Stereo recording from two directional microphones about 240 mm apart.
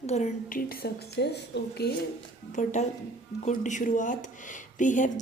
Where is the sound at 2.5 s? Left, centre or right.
Left.